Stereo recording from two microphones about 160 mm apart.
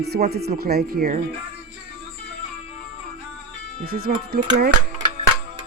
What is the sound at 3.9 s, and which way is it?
Speech, 75° right (ahead or behind).